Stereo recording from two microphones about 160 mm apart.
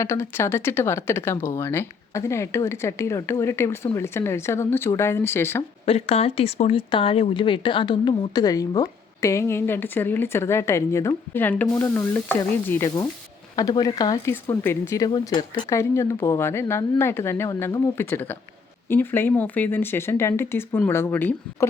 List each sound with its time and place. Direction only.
0.0 s speech: 15° left (ahead or behind)
5.8 s speech: 40° left (ahead or behind); by 21.7 s 10° left (ahead or behind)